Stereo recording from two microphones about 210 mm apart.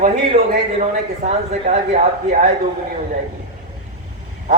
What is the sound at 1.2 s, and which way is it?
Speech, 30° right (ahead or behind).